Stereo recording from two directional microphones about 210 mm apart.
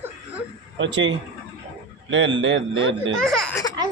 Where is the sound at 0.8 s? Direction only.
60° right (ahead or behind).